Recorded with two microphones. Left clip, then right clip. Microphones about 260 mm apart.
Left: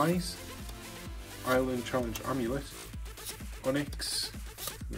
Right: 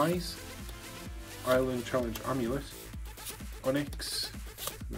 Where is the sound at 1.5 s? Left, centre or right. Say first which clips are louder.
Right 1 dB; centre.